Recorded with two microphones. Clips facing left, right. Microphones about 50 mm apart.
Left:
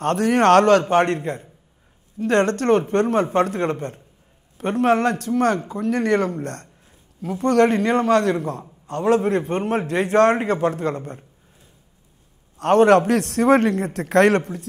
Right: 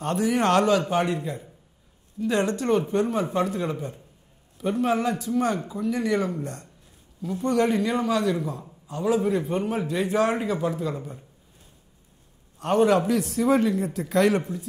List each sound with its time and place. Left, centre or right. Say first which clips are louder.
0.0 s a man's voice: left 6 dB; left
12.5 s a man's voice: left 6 dB; left